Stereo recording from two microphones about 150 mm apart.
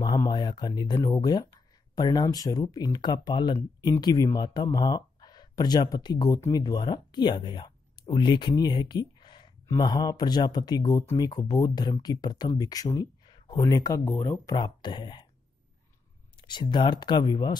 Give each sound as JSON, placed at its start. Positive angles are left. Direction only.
{"t": 0.0, "sound": "speech", "side_deg": 25}
{"t": 14.5, "sound": "speech", "side_deg": 30}
{"t": 16.3, "sound": "speech", "side_deg": 30}